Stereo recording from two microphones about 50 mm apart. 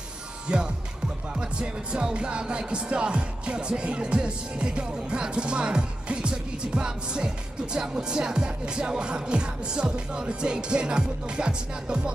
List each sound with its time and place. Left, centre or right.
0.5 s music: centre